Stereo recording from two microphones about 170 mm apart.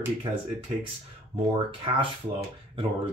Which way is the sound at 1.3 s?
30° right (ahead or behind).